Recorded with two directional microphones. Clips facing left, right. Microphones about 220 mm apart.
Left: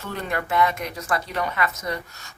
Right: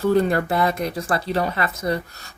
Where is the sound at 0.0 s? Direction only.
35° right (ahead or behind).